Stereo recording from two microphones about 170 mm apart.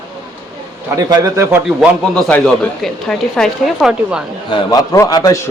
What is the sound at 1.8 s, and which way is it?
A man's voice, centre (ahead or behind).